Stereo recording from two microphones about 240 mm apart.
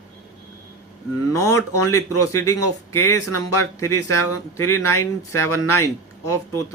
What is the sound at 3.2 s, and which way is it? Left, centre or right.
Speech, left.